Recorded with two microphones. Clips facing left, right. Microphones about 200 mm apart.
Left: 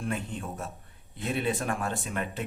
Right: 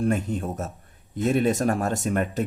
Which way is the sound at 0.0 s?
40° right (ahead or behind).